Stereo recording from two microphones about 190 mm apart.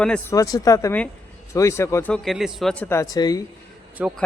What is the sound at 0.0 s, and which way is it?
Speech, 5° left (ahead or behind).